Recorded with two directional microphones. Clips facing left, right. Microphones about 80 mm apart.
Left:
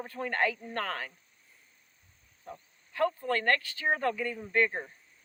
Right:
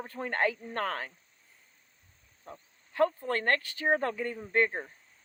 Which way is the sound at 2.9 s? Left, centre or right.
Right.